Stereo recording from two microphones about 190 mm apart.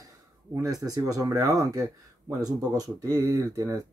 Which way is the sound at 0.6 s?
20° right (ahead or behind).